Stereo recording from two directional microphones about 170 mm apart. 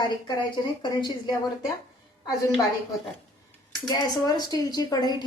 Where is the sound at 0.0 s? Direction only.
25° left (ahead or behind).